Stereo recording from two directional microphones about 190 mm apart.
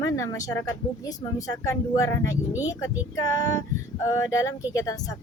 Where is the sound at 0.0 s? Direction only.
15° left (ahead or behind).